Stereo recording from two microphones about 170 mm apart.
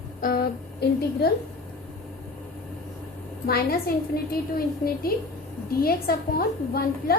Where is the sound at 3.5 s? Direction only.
65° left (ahead or behind).